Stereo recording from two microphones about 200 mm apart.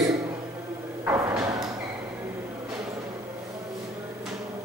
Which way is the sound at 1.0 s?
10° right (ahead or behind).